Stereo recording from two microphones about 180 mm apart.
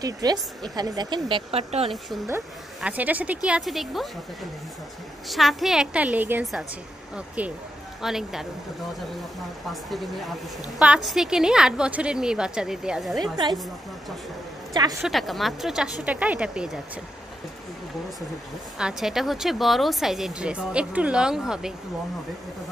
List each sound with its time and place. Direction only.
0.0 s speech: 20° right (ahead or behind)
2.2 s speech: 10° right (ahead or behind)
5.3 s speech: centre (ahead or behind)
10.8 s speech: 5° right (ahead or behind)
13.2 s speech: 25° right (ahead or behind)
14.7 s a woman's voice: 20° right (ahead or behind)
15.0 s speech: centre (ahead or behind)
18.8 s speech: 5° right (ahead or behind)